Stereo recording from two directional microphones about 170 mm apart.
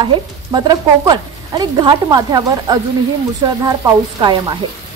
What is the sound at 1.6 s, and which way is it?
Speech, 25° right (ahead or behind).